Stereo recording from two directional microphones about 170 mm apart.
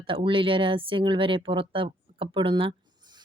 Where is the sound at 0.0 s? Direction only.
30° right (ahead or behind).